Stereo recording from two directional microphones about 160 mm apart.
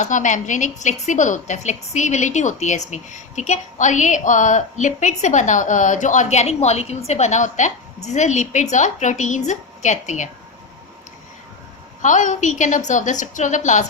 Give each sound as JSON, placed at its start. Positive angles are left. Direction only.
{"t": 0.0, "sound": "a woman's voice", "side_deg": 50}
{"t": 12.0, "sound": "a woman's voice", "side_deg": 50}